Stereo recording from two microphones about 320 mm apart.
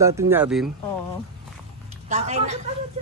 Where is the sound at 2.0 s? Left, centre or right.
Right.